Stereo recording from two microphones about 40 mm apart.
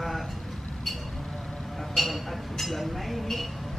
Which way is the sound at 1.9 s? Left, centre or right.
Centre.